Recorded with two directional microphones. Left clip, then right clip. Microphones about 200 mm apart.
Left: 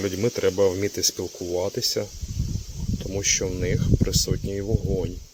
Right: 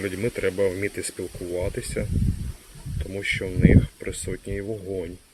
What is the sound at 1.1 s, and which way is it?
Speech, centre (ahead or behind).